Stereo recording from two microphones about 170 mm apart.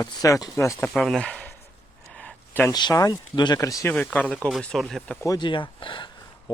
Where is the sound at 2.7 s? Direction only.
20° left (ahead or behind).